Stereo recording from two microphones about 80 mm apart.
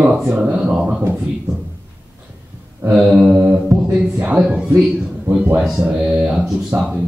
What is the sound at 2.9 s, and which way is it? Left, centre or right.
Mantra, centre.